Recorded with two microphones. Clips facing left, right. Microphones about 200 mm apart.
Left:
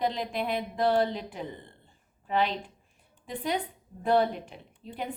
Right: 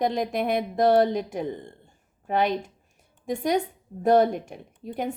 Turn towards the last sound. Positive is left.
turn(degrees=-45)  # may be behind; listen again after turning